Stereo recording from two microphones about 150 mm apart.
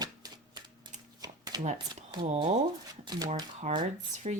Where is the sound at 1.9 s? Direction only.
30° right (ahead or behind).